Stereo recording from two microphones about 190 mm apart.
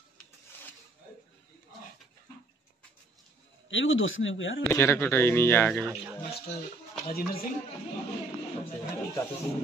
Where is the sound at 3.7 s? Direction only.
90° left.